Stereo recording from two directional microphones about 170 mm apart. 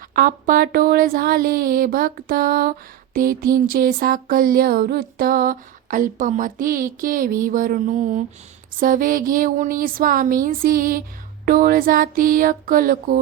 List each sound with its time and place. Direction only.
0.1 s a woman's voice: 55° right (ahead or behind)